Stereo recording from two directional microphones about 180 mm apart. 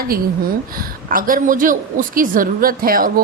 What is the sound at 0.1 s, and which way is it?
A woman's voice, 55° right (ahead or behind).